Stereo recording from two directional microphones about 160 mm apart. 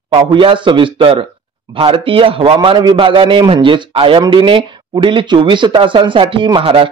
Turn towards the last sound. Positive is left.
turn(degrees=-35)  # may be behind; listen again after turning